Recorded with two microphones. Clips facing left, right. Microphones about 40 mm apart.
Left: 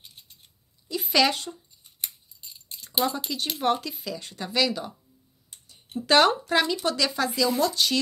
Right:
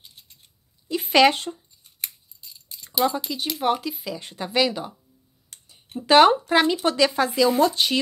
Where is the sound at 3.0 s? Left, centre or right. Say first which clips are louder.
Right 5 dB; centre.